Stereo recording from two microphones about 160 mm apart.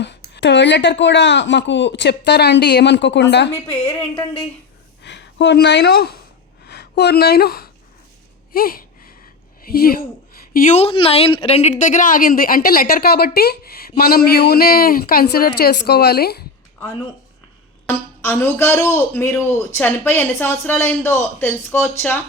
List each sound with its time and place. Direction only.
0.0 s a woman's voice: 90° left
5.0 s speech: 90° left; by 7.7 s 75° left (ahead or behind)
8.5 s a sound: 65° left (ahead or behind)
9.6 s speech: 70° left (ahead or behind)
10.5 s a woman's voice: 55° left (ahead or behind)
10.8 s a woman's voice: 35° left (ahead or behind); by 16.4 s 80° left
17.8 s a man's voice: 15° left (ahead or behind)